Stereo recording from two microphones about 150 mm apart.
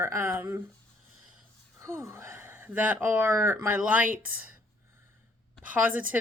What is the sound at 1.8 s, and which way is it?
A woman's voice, 20° right (ahead or behind).